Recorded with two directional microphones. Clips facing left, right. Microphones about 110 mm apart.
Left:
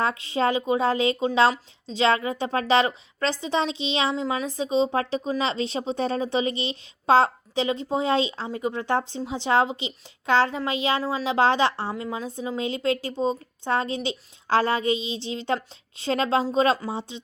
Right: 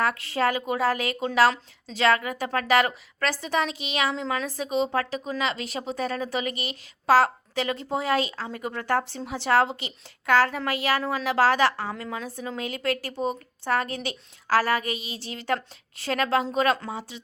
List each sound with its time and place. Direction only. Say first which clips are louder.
0.0 s a woman's voice: left 1 dB; 20° left (ahead or behind)